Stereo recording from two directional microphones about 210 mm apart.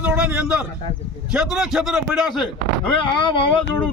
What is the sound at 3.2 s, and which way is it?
Speech, 25° left (ahead or behind).